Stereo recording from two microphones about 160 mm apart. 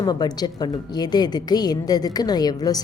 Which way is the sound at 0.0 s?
25° left (ahead or behind).